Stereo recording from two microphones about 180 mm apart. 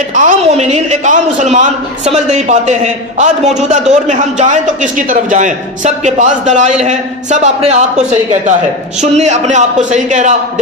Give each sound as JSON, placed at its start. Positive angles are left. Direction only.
{"t": 0.1, "sound": "a man's voice", "side_deg": -40}